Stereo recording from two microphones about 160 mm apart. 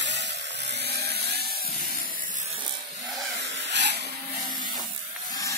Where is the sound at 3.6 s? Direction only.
90° right.